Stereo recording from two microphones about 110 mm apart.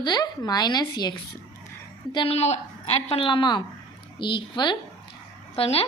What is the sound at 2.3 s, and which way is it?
Speech, 75° left (ahead or behind).